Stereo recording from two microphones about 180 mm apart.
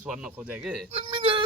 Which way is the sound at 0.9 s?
30° right (ahead or behind).